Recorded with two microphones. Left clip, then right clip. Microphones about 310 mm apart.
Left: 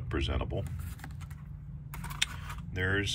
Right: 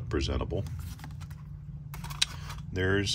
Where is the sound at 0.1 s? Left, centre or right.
Centre.